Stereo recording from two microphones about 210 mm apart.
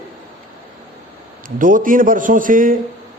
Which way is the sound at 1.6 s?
40° right (ahead or behind).